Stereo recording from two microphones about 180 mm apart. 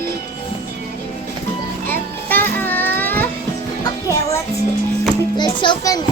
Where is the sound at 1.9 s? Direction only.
10° left (ahead or behind).